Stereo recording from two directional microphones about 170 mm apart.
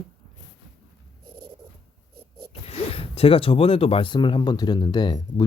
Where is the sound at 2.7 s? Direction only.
35° left (ahead or behind).